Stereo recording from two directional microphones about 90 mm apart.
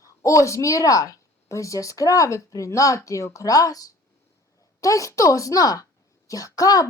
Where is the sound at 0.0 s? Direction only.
35° left (ahead or behind).